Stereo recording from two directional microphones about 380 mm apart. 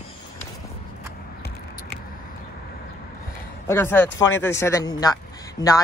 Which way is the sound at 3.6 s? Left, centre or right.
Centre.